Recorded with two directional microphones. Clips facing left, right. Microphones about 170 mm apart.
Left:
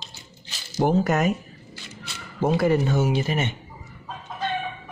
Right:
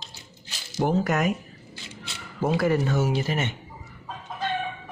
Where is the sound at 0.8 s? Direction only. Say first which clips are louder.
Left 3 dB; 30° left (ahead or behind).